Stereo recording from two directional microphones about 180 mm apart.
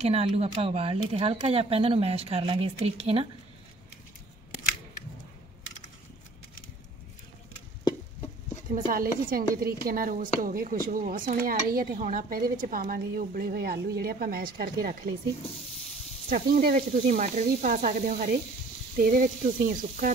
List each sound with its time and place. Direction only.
0.0 s speech: 35° right (ahead or behind)
8.6 s speech: 45° right (ahead or behind)
16.3 s speech: 50° right (ahead or behind)